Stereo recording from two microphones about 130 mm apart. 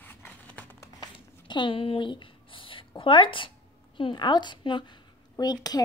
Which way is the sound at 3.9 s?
40° left (ahead or behind).